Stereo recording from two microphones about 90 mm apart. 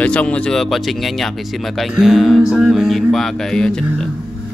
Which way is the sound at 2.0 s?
Centre (ahead or behind).